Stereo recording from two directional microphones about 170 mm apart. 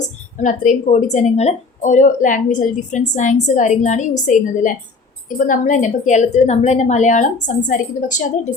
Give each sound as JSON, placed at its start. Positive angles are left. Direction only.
{"t": 0.0, "sound": "a woman's voice", "side_deg": 50}